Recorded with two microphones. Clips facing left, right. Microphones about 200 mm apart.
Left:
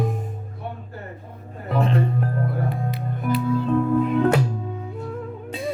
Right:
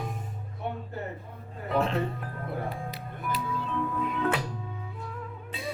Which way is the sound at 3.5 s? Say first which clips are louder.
Left 14 dB; 45° left (ahead or behind).